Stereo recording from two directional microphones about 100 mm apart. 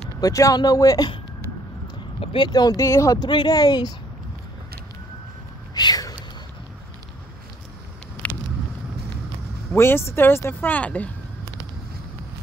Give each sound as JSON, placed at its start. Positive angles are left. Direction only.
{"t": 0.2, "sound": "speech", "side_deg": 35}
{"t": 2.3, "sound": "speech", "side_deg": 45}
{"t": 3.3, "sound": "speech", "side_deg": 45}
{"t": 5.8, "sound": "a sound", "side_deg": 40}
{"t": 8.2, "sound": "vehicle", "side_deg": 15}
{"t": 9.8, "sound": "speech", "side_deg": 25}